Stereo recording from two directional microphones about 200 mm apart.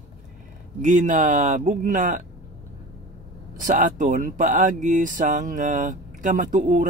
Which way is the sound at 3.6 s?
40° right (ahead or behind).